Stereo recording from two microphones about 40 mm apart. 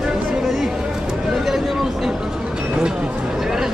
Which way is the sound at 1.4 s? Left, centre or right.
Centre.